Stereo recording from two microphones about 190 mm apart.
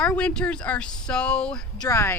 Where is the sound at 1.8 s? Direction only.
15° left (ahead or behind).